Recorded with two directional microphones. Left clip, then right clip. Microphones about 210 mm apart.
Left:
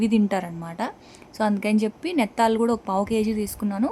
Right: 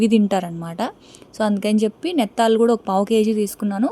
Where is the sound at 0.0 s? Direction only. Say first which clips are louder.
Right 5 dB; 20° right (ahead or behind).